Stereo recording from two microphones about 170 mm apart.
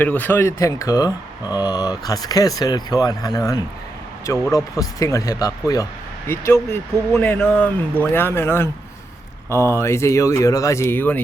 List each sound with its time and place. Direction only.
0.0 s speech: 10° left (ahead or behind)